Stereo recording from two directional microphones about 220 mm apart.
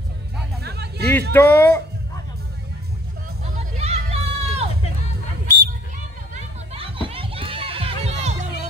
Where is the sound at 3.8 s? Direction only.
30° right (ahead or behind).